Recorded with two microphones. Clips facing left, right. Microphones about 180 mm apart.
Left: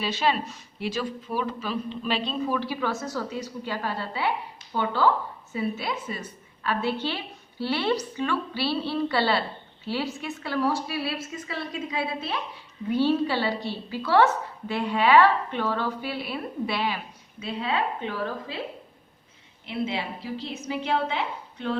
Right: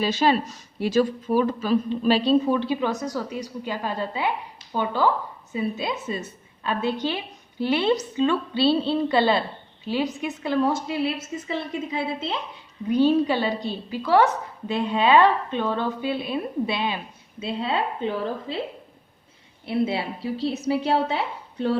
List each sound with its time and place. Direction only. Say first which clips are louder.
0.0 s speech: right 5 dB; 40° right (ahead or behind)
2.6 s a woman's voice: right 4 dB; 20° right (ahead or behind)
20.4 s speech: right 11 dB; 35° right (ahead or behind)